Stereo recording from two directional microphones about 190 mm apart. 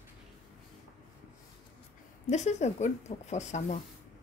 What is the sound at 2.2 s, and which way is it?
A woman's voice, 35° left (ahead or behind).